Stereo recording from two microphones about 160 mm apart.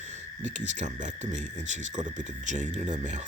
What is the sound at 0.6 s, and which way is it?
Speech, 50° right (ahead or behind).